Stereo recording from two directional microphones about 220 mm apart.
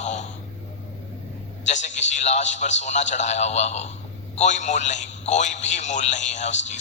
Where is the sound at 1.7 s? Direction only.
30° left (ahead or behind).